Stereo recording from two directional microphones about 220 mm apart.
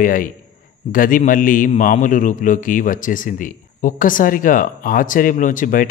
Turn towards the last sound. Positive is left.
turn(degrees=35)  # may be behind; listen again after turning